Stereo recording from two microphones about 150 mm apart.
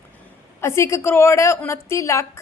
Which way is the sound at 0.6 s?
20° left (ahead or behind).